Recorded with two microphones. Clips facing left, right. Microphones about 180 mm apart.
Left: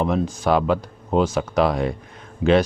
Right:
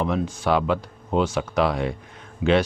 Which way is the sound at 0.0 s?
40° left (ahead or behind).